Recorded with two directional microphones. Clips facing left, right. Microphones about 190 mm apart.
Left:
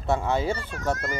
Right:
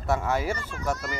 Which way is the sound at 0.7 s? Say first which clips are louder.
Left 2 dB; 50° left (ahead or behind).